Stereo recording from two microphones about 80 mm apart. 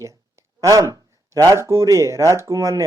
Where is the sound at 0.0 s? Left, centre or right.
Right.